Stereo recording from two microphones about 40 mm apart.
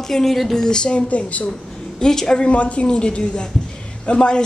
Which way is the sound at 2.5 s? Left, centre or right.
Left.